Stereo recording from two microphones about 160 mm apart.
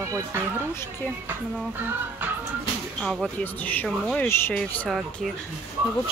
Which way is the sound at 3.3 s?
10° left (ahead or behind).